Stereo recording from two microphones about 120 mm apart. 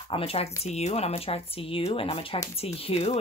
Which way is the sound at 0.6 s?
65° left (ahead or behind).